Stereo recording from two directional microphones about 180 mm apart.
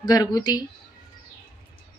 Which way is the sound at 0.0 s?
20° left (ahead or behind).